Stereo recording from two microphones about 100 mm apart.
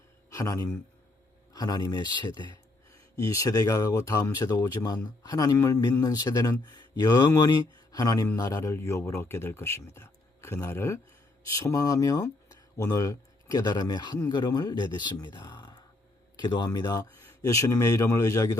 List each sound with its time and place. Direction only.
0.3 s speech: 35° left (ahead or behind)
3.2 s speech: 30° left (ahead or behind)